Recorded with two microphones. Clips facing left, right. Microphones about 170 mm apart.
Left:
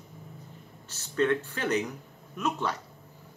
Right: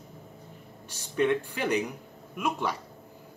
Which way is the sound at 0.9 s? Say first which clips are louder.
Right 1 dB; 15° right (ahead or behind).